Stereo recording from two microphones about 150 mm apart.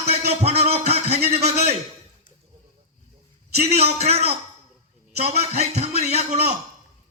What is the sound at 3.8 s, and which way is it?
A man's voice, 45° right (ahead or behind).